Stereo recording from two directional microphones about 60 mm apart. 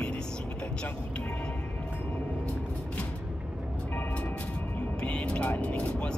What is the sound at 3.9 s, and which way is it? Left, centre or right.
Music, left.